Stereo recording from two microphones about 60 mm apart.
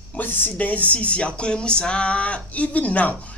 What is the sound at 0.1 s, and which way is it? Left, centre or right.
Speech, left.